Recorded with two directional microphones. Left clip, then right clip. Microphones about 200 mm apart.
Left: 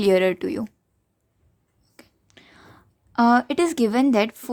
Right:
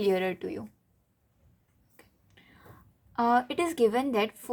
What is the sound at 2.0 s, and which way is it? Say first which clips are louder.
Whispering: left 8 dB; 45° left (ahead or behind).